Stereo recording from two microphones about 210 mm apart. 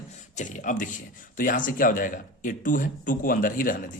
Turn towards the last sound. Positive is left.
turn(degrees=40)  # may be behind; listen again after turning